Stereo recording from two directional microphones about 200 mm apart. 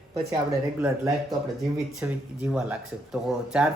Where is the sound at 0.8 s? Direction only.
15° right (ahead or behind).